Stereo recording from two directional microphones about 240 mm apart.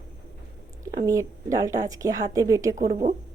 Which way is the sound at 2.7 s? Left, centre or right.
Right.